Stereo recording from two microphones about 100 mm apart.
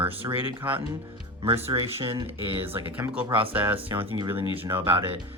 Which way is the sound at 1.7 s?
70° right (ahead or behind).